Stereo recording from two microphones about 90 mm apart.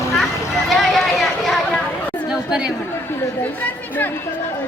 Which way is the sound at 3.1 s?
25° left (ahead or behind).